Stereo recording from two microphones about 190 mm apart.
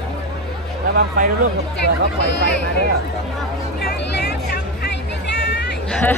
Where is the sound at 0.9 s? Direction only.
45° right (ahead or behind).